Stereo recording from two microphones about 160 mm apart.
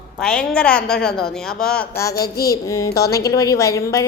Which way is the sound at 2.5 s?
20° left (ahead or behind).